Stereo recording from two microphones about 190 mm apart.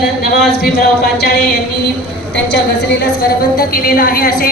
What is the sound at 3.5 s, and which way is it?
Speech, 50° left (ahead or behind).